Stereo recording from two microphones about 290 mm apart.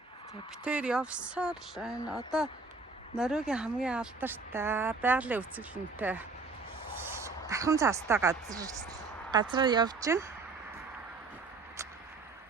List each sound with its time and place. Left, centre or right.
0.6 s speech: centre
3.2 s speech: centre